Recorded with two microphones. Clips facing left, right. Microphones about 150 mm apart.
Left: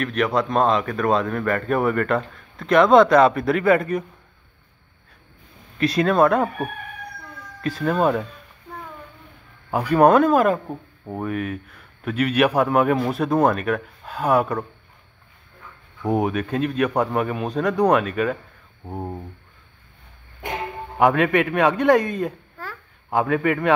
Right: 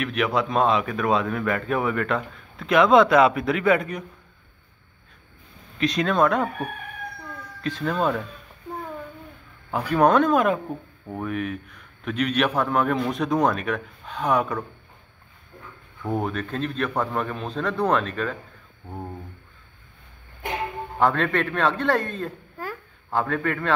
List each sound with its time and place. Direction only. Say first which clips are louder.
0.0 s speech: left 2 dB; centre (ahead or behind)
5.8 s speech: left 3 dB; 5° left (ahead or behind)
7.6 s a man's voice: left 4 dB; 5° left (ahead or behind)
9.7 s a man's voice: left 4 dB; 10° left (ahead or behind)
10.7 s speech: left 1 dB; 15° left (ahead or behind)
11.2 s speech: left 1 dB; centre (ahead or behind)
16.0 s a man's voice: left 5 dB; 20° left (ahead or behind)
18.9 s a sound: left 5 dB; 20° left (ahead or behind)
21.0 s a man's voice: left 4 dB; 15° left (ahead or behind)